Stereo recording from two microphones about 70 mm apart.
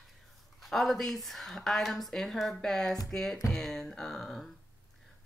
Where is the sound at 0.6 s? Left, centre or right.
Centre.